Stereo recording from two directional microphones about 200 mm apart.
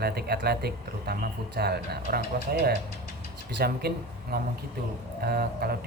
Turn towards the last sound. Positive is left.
turn(degrees=-50)  # may be behind; listen again after turning